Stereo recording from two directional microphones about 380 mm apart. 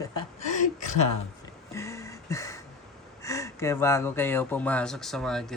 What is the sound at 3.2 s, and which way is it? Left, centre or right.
Speech, centre.